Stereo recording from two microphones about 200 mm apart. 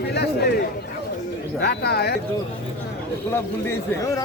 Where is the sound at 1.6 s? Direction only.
55° left (ahead or behind).